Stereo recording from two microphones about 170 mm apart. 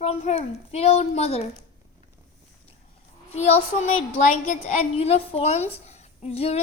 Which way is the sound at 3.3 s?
40° left (ahead or behind).